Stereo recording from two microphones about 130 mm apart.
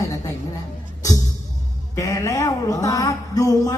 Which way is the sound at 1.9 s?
25° left (ahead or behind).